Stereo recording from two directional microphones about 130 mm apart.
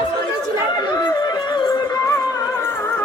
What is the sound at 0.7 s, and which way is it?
Music, 30° left (ahead or behind).